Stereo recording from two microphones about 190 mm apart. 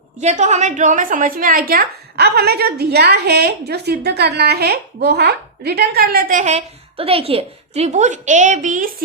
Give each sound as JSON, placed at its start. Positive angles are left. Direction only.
{"t": 0.2, "sound": "a woman's voice", "side_deg": -35}